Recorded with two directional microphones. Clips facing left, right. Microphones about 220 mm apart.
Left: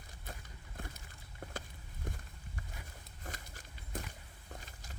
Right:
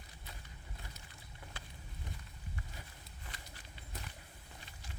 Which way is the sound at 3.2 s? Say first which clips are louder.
Left 6 dB; 45° left (ahead or behind).